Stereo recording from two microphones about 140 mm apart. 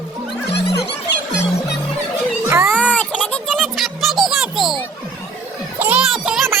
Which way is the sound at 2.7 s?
10° left (ahead or behind).